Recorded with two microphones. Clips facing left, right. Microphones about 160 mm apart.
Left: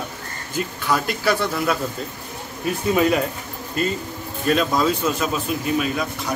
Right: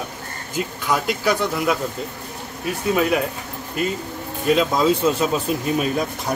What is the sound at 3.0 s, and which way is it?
Speech, 5° right (ahead or behind).